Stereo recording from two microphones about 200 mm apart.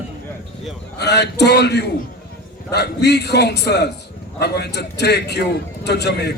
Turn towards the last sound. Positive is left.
turn(degrees=55)  # may be behind; listen again after turning